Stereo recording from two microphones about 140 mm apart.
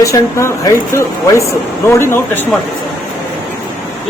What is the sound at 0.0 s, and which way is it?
Speech, 20° left (ahead or behind).